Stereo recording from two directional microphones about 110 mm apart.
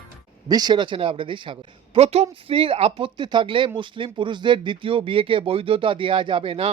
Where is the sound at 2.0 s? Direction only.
75° right (ahead or behind).